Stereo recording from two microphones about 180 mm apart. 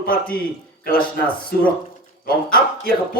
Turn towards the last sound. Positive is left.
turn(degrees=55)  # may be behind; listen again after turning